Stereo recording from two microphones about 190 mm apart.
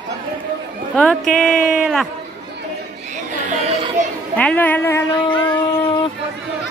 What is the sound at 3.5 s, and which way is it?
Children playing, 35° right (ahead or behind).